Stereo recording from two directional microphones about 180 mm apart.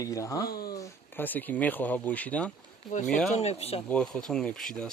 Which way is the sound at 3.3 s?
35° left (ahead or behind).